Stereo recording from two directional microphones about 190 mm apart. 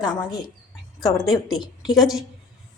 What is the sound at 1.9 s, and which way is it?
Speech, centre (ahead or behind).